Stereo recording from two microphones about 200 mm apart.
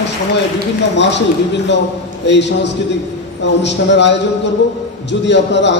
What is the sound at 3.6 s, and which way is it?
Speech, 60° left (ahead or behind).